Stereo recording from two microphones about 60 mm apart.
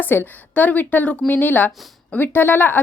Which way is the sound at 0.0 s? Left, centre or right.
Left.